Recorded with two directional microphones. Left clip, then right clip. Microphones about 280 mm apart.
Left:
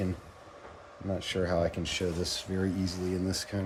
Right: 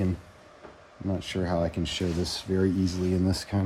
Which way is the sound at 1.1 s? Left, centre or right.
Centre.